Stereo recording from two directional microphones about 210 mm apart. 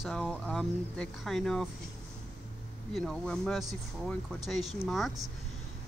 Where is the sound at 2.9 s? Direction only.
5° left (ahead or behind).